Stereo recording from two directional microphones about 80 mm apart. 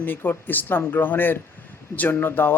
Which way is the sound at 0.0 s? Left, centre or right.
Left.